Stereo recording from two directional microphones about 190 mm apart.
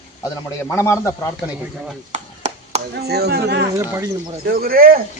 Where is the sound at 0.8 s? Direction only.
15° left (ahead or behind).